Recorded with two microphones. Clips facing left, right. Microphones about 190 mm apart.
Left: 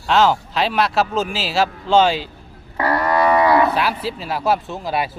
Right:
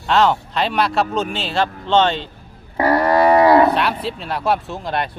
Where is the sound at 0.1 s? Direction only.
Centre (ahead or behind).